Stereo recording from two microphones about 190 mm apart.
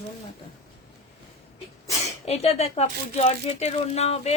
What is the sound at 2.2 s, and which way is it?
A woman's voice, 35° left (ahead or behind).